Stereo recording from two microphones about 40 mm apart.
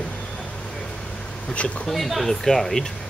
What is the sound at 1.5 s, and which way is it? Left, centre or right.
Speech, left.